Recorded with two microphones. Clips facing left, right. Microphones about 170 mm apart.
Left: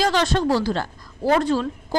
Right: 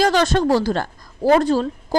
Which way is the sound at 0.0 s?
45° right (ahead or behind).